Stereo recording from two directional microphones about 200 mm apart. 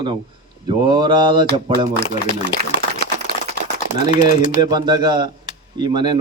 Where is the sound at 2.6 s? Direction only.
55° right (ahead or behind).